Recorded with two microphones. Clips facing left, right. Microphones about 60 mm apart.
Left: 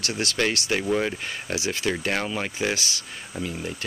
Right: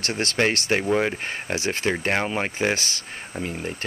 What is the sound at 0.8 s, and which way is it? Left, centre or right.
Speech, right.